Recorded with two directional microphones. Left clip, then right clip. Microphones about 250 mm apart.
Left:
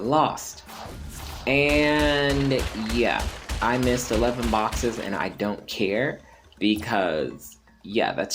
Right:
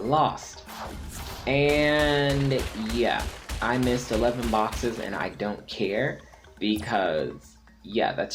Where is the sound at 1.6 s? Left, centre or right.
Centre.